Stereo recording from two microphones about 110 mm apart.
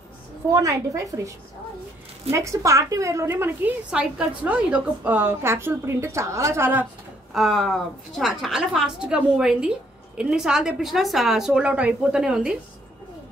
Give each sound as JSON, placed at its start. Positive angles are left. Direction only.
{"t": 0.5, "sound": "a woman's voice", "side_deg": -30}
{"t": 2.3, "sound": "a woman's voice", "side_deg": -30}
{"t": 3.9, "sound": "a woman's voice", "side_deg": -10}
{"t": 7.3, "sound": "a woman's voice", "side_deg": 0}